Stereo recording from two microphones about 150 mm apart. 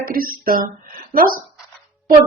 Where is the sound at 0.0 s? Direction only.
70° right (ahead or behind).